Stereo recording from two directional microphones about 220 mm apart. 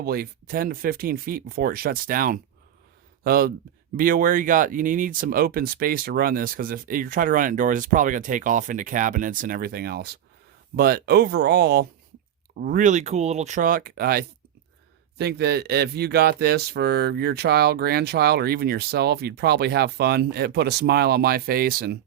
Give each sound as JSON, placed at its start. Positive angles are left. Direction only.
{"t": 0.0, "sound": "speech", "side_deg": -45}